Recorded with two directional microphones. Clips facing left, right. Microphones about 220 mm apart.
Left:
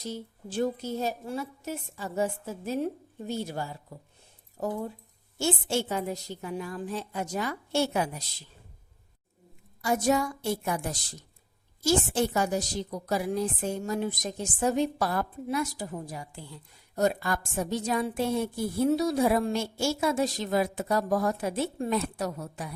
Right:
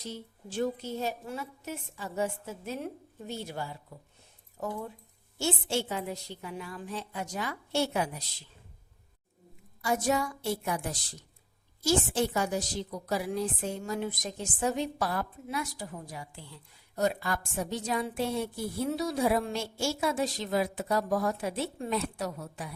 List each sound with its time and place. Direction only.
0.0 s a woman's voice: 40° left (ahead or behind)
5.4 s a woman's voice: 45° left (ahead or behind)
9.8 s a woman's voice: 45° left (ahead or behind)
11.9 s a woman's voice: 45° left (ahead or behind)
16.9 s a woman's voice: 45° left (ahead or behind)